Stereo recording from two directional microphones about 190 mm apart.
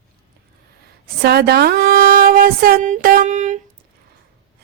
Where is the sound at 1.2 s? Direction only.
55° right (ahead or behind); by 3.6 s 40° right (ahead or behind).